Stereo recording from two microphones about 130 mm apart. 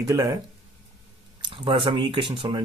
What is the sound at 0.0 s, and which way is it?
Speech, 25° right (ahead or behind).